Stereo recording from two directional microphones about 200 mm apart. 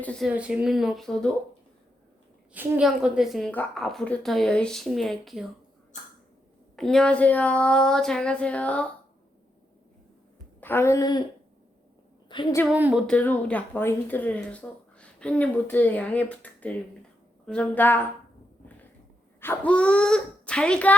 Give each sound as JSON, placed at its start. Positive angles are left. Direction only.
{"t": 0.0, "sound": "a woman's voice", "side_deg": 5}
{"t": 0.3, "sound": "a woman's voice", "side_deg": -5}
{"t": 2.5, "sound": "a woman's voice", "side_deg": -5}
{"t": 6.7, "sound": "a woman's voice", "side_deg": 0}
{"t": 10.6, "sound": "a woman's voice", "side_deg": 10}
{"t": 12.3, "sound": "a woman's voice", "side_deg": 25}
{"t": 12.6, "sound": "speech", "side_deg": -5}
{"t": 19.4, "sound": "a woman's voice", "side_deg": 10}